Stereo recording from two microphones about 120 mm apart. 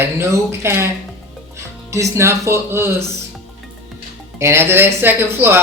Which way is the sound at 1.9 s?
25° right (ahead or behind).